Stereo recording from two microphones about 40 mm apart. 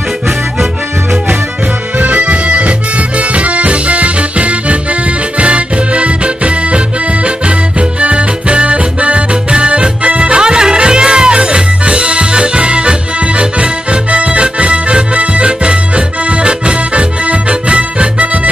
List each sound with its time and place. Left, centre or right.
2.0 s accordion: right
3.2 s music: right
8.0 s music: right
16.3 s accordion: right